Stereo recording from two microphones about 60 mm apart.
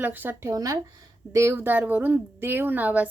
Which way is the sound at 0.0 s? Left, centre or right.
Right.